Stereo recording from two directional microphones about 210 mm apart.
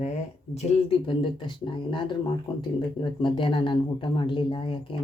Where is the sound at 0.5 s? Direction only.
30° left (ahead or behind).